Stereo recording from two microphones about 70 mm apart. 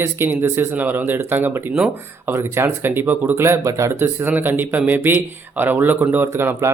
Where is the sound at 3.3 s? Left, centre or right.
Right.